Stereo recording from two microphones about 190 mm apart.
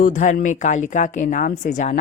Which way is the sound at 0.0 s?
45° left (ahead or behind).